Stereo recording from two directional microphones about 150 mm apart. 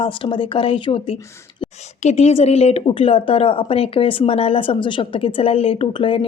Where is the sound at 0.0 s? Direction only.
35° left (ahead or behind).